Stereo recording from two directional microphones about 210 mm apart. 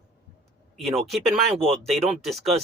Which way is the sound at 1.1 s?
Centre (ahead or behind).